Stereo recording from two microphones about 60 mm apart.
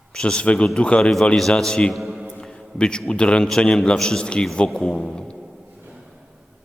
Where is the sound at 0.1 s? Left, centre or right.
Centre.